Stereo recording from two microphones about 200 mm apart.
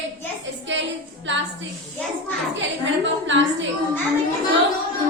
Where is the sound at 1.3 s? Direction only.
65° right (ahead or behind).